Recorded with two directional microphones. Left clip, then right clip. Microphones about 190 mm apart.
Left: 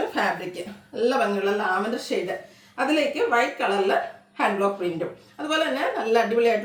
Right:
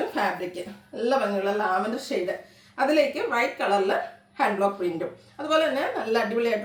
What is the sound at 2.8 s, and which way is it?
A woman's voice, 10° left (ahead or behind).